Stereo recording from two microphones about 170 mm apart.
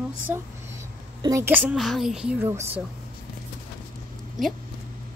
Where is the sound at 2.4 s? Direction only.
15° right (ahead or behind).